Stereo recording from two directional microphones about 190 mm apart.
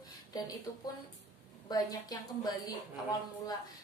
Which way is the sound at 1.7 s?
20° left (ahead or behind).